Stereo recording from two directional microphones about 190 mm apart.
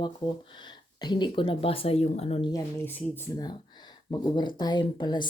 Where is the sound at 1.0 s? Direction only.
25° left (ahead or behind).